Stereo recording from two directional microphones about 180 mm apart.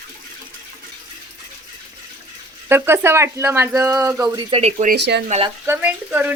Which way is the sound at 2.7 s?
15° right (ahead or behind).